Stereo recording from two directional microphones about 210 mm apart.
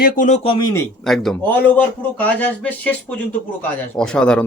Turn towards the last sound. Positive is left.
turn(degrees=5)  # may be behind; listen again after turning